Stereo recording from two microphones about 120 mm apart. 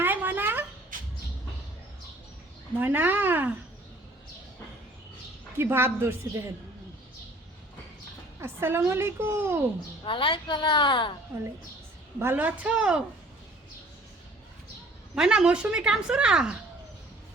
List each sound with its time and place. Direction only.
0.0 s a sound: 15° right (ahead or behind)
2.7 s a woman's voice: 15° right (ahead or behind)
5.5 s a woman's voice: 20° right (ahead or behind)
8.4 s a woman's voice: 20° right (ahead or behind)
10.0 s a woman's voice: 45° left (ahead or behind)
12.2 s a woman's voice: 15° right (ahead or behind)
15.1 s a woman's voice: 5° right (ahead or behind)